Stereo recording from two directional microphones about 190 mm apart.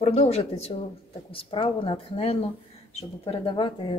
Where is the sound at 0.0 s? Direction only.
35° left (ahead or behind).